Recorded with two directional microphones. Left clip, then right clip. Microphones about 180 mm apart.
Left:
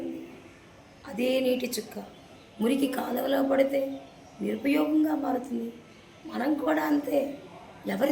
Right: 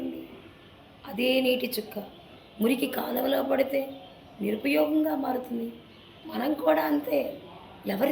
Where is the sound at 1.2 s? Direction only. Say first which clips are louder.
Right 1 dB; 15° left (ahead or behind).